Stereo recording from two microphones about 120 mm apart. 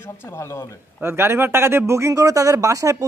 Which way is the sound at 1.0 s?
20° right (ahead or behind).